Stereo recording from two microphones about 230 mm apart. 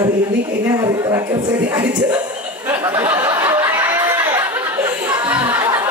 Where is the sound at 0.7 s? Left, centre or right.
Centre.